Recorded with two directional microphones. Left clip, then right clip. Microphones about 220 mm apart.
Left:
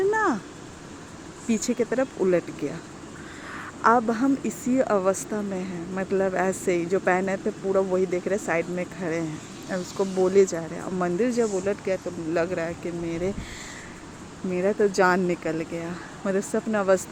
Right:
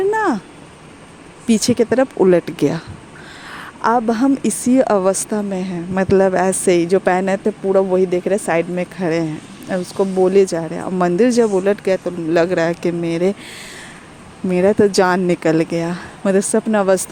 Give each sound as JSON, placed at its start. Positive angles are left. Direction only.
{"t": 0.1, "sound": "a sound", "side_deg": -35}
{"t": 1.5, "sound": "a woman's voice", "side_deg": -45}
{"t": 14.5, "sound": "a woman's voice", "side_deg": -45}